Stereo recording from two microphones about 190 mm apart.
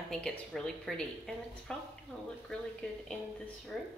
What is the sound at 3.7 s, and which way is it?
Speech, centre (ahead or behind).